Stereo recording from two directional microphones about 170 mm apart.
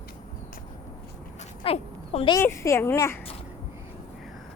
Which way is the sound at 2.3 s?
15° left (ahead or behind).